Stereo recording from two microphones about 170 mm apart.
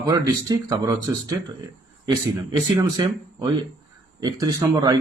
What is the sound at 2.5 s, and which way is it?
A man's voice, 25° right (ahead or behind).